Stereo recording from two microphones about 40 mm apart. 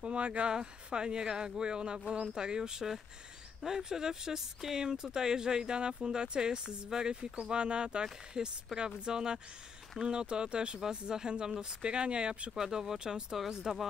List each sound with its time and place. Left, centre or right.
0.0 s speech: right
0.5 s speech: centre
12.5 s speech: centre